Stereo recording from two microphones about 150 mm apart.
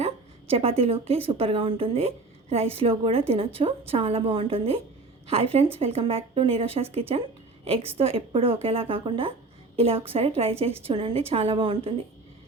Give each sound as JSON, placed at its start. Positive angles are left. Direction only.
{"t": 0.0, "sound": "a woman's voice", "side_deg": -40}